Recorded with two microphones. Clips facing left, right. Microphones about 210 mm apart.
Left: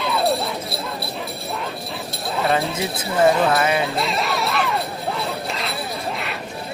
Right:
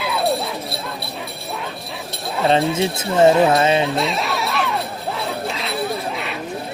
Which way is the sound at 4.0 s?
Centre (ahead or behind).